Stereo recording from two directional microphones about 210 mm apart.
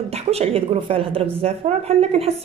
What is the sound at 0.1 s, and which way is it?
A woman's voice, 30° right (ahead or behind).